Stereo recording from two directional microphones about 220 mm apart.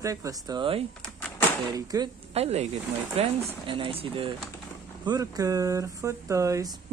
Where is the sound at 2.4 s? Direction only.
30° right (ahead or behind); by 6.7 s 15° right (ahead or behind).